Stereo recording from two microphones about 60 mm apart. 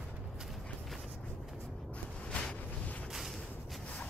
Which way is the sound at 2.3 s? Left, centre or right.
Centre.